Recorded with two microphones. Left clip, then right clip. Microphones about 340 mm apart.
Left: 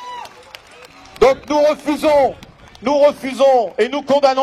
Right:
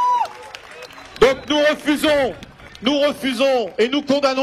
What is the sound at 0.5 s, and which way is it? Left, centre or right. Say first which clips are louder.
Run: right 1 dB; centre.